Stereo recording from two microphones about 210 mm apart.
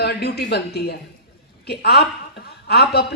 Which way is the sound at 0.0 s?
50° left (ahead or behind).